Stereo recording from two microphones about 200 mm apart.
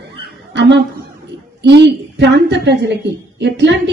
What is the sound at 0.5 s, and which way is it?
A woman's voice, 60° right (ahead or behind).